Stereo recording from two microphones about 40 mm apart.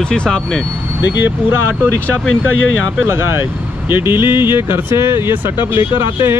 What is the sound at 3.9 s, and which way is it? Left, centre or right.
Speech, right.